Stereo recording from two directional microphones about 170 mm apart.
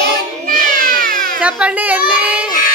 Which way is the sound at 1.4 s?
5° right (ahead or behind).